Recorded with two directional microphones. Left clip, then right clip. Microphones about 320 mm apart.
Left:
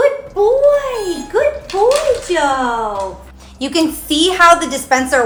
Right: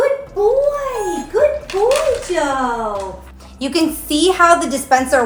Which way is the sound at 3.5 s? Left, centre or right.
Left.